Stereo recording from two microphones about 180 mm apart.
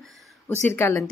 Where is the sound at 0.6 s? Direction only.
15° left (ahead or behind).